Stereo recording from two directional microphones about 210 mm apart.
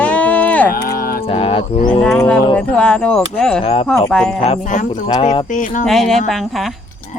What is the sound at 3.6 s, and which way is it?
Speech, 25° left (ahead or behind).